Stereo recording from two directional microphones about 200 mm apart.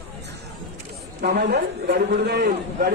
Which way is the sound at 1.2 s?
55° right (ahead or behind).